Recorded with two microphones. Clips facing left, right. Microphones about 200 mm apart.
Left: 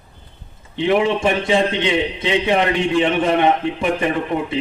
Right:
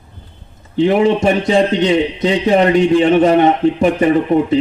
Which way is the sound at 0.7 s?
40° right (ahead or behind).